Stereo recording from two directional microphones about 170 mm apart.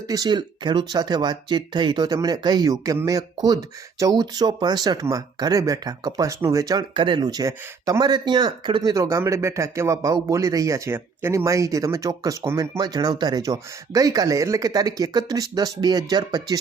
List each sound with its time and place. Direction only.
0.1 s speech: 25° right (ahead or behind)